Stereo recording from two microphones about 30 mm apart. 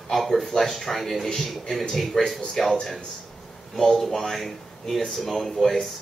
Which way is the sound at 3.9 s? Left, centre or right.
Centre.